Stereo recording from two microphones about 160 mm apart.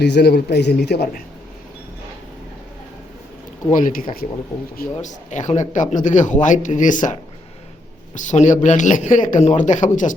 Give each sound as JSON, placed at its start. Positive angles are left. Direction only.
{"t": 0.0, "sound": "a man's voice", "side_deg": 90}
{"t": 3.7, "sound": "speech", "side_deg": 55}